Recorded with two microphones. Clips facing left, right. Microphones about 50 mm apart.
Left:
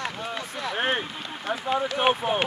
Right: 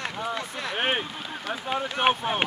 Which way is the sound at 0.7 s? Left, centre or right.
Centre.